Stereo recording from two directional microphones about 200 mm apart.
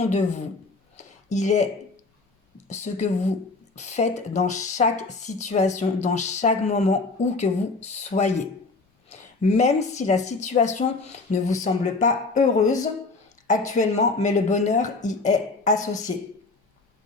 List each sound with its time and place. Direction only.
0.0 s speech: 35° left (ahead or behind)
0.9 s a sound: 35° left (ahead or behind)
2.6 s speech: 35° left (ahead or behind)